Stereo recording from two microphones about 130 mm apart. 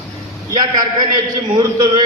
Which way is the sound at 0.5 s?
30° right (ahead or behind).